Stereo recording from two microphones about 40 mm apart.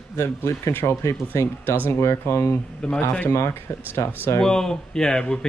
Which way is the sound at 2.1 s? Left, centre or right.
Left.